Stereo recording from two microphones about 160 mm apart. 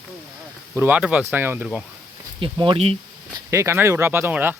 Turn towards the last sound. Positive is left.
turn(degrees=-10)  # may be behind; listen again after turning